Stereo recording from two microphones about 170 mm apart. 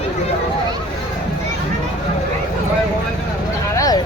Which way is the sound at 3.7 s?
20° left (ahead or behind).